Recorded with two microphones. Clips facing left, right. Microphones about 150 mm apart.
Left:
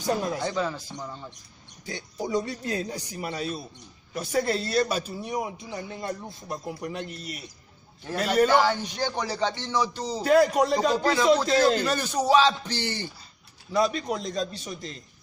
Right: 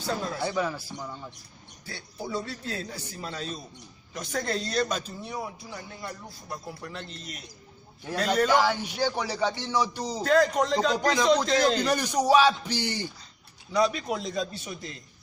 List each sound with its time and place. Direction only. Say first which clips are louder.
0.0 s a man's voice: left 3 dB; 15° left (ahead or behind)
0.5 s speech: even; 10° right (ahead or behind)
1.9 s a man's voice: left 5 dB; 20° left (ahead or behind)
8.6 s speech: even; 10° right (ahead or behind)
10.2 s a man's voice: left 3 dB; 10° left (ahead or behind)
11.8 s speech: right 1 dB; 15° right (ahead or behind)
13.7 s a man's voice: left 1 dB; centre (ahead or behind)